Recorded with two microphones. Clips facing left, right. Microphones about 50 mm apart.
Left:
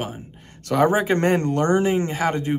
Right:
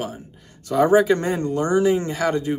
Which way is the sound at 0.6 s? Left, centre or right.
Left.